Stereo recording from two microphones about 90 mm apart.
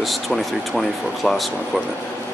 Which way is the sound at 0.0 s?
Centre (ahead or behind).